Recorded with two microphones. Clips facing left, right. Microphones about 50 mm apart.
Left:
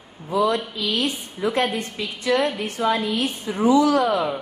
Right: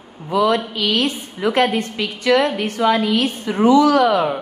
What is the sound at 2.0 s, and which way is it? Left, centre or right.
Speech, right.